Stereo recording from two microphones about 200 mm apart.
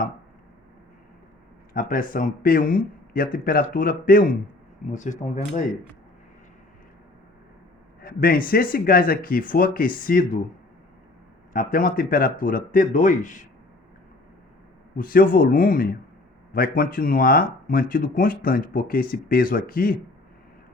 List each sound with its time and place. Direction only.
1.7 s speech: 45° left (ahead or behind)
8.0 s speech: 45° left (ahead or behind)
11.5 s speech: 45° left (ahead or behind)
14.9 s speech: 45° left (ahead or behind)